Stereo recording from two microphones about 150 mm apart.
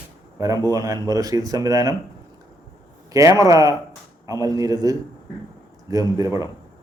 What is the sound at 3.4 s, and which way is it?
A man's voice, 25° right (ahead or behind).